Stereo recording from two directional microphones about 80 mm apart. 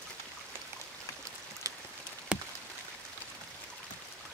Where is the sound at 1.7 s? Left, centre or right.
Right.